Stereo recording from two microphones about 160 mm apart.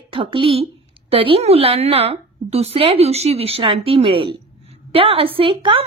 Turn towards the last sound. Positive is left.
turn(degrees=-30)  # may be behind; listen again after turning